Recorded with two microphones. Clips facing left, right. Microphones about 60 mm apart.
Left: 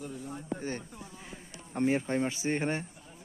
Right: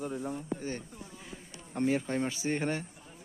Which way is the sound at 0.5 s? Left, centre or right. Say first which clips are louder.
Left 1 dB; left.